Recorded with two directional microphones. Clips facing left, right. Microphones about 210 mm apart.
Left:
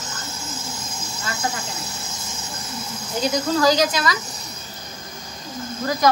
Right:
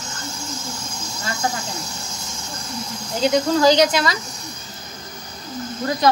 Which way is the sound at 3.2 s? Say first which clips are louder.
Right 3 dB; 25° right (ahead or behind).